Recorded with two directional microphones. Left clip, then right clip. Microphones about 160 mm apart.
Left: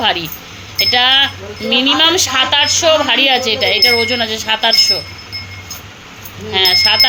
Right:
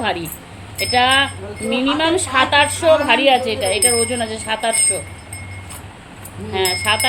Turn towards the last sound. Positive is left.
turn(degrees=0)  # may be behind; listen again after turning